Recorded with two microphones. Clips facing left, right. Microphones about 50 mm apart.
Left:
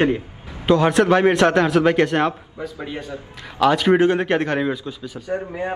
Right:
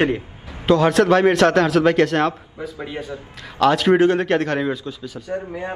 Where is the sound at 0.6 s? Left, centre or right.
Centre.